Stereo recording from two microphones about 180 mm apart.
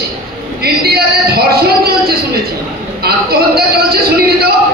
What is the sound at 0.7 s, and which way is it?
A man's voice, 60° right (ahead or behind).